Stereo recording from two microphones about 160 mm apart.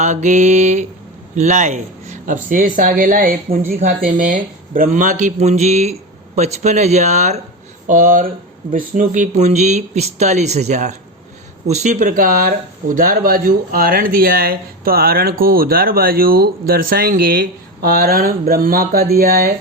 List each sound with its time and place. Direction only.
0.0 s speech: 45° right (ahead or behind)
7.9 s speech: 55° right (ahead or behind)